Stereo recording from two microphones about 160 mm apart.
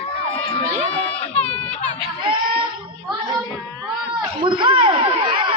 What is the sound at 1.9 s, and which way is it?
Speech, 35° right (ahead or behind).